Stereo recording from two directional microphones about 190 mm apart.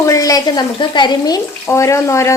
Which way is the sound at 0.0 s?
15° left (ahead or behind).